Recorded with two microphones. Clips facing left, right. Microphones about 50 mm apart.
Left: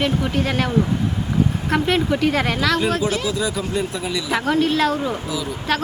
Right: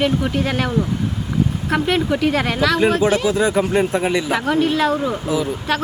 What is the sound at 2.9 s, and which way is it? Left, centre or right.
Speech, centre.